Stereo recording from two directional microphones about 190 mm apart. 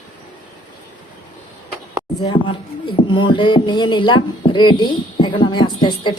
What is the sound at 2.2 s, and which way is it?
Speech, 25° left (ahead or behind).